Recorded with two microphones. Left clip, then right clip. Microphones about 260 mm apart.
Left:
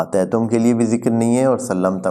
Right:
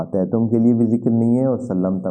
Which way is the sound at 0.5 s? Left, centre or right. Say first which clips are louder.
Left 1 dB; centre.